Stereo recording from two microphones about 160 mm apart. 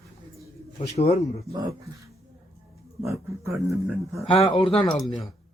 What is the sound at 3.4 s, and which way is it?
Speech, 20° right (ahead or behind).